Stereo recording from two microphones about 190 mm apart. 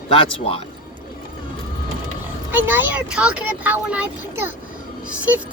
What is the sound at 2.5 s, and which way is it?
A woman's voice, 10° right (ahead or behind).